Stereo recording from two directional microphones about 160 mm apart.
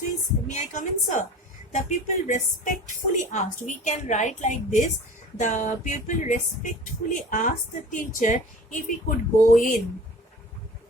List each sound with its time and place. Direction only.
0.4 s a woman's voice: 50° left (ahead or behind)